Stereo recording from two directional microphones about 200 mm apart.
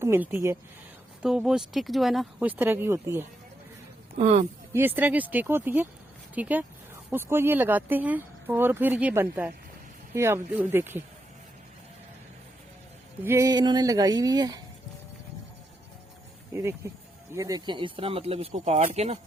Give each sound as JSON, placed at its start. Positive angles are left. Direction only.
{"t": 0.0, "sound": "speech", "side_deg": -10}
{"t": 4.2, "sound": "speech", "side_deg": -35}
{"t": 4.7, "sound": "speech", "side_deg": -10}
{"t": 13.2, "sound": "speech", "side_deg": -15}
{"t": 17.3, "sound": "speech", "side_deg": -20}